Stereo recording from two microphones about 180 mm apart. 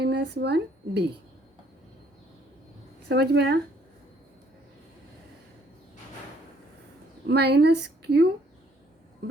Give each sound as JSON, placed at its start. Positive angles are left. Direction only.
{"t": 0.0, "sound": "speech", "side_deg": -70}
{"t": 3.1, "sound": "speech", "side_deg": -65}
{"t": 7.3, "sound": "speech", "side_deg": -65}